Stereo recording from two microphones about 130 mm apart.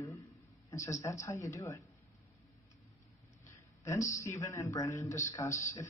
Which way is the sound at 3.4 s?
25° left (ahead or behind).